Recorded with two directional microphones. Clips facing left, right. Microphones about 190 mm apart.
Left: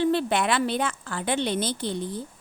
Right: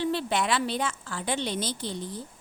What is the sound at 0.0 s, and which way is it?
A woman's voice, 55° left (ahead or behind).